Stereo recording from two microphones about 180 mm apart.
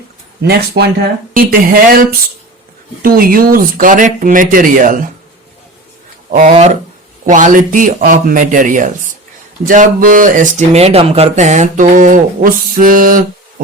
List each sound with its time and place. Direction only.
0.4 s speech: 60° right (ahead or behind)
6.3 s speech: 40° right (ahead or behind)